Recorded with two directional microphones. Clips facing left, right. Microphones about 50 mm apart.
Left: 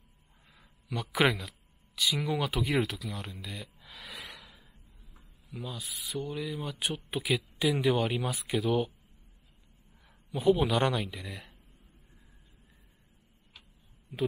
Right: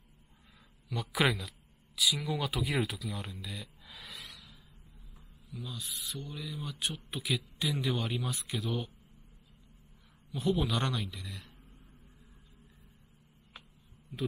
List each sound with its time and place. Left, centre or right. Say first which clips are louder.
1.1 s speech: left 3 dB; centre
4.1 s gasp: left 7 dB; centre
5.5 s owl: left 3 dB; centre
5.8 s speech: left 5 dB; centre
10.3 s speech: left 6 dB; centre
14.1 s speech: left 5 dB; centre